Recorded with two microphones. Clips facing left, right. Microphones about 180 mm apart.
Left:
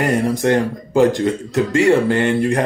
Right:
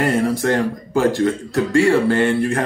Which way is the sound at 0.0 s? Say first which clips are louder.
Left 1 dB; 20° left (ahead or behind).